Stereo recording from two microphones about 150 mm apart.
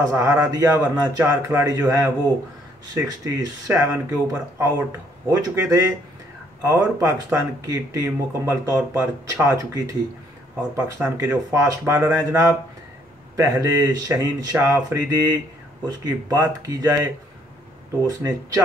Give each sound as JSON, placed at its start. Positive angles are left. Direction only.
{"t": 0.1, "sound": "a man's voice", "side_deg": -20}
{"t": 18.0, "sound": "a man's voice", "side_deg": -25}